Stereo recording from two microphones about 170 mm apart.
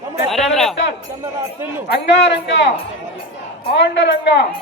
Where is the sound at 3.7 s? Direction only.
90° left.